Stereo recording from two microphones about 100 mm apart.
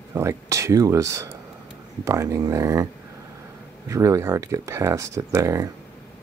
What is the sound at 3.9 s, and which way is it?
Speech, 30° right (ahead or behind).